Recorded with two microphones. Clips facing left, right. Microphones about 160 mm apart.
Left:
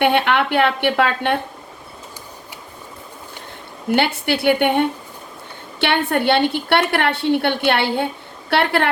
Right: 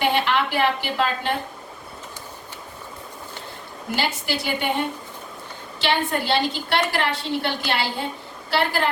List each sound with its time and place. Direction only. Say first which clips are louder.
0.0 s a woman's voice: left 5 dB; 60° left (ahead or behind)
3.9 s a woman's voice: left 7 dB; 60° left (ahead or behind)